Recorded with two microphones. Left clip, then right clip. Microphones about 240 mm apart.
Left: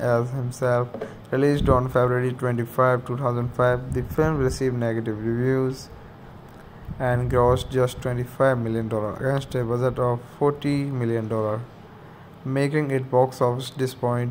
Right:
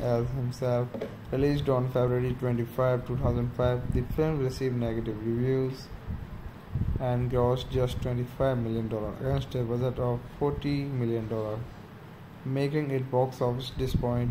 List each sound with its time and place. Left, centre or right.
0.0 s speech: centre
7.0 s speech: centre
12.5 s speech: centre